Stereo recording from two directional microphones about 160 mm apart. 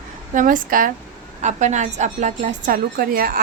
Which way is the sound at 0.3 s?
60° right (ahead or behind).